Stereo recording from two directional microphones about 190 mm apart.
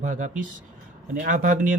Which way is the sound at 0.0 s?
40° right (ahead or behind).